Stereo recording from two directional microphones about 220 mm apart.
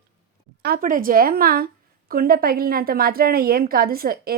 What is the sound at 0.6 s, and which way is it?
A woman's voice, 40° right (ahead or behind).